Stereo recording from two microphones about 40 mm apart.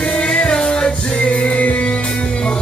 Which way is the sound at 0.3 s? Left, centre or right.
Left.